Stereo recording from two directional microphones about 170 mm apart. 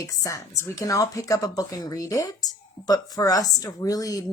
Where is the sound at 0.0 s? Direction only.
20° left (ahead or behind).